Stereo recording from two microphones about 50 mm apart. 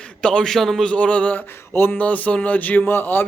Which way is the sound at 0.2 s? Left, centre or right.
Centre.